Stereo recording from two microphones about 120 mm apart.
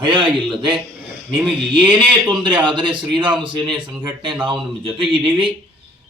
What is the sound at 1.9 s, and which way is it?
A man's voice, 40° right (ahead or behind).